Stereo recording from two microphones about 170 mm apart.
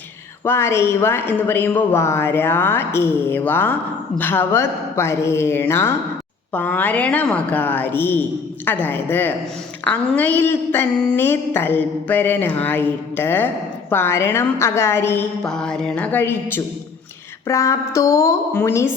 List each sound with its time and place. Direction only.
0.4 s a woman's voice: 15° left (ahead or behind)